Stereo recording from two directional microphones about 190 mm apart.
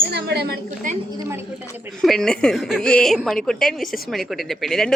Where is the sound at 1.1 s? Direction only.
10° right (ahead or behind).